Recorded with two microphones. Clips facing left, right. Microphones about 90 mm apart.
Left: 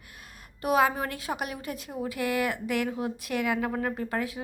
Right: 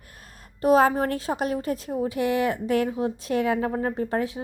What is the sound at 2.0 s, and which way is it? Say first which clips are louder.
A woman's voice: right 4 dB; 25° right (ahead or behind).